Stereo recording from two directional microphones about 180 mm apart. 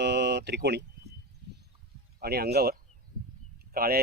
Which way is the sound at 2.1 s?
60° right (ahead or behind).